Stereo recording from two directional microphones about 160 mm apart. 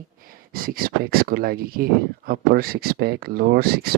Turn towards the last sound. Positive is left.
turn(degrees=-75)  # may be behind; listen again after turning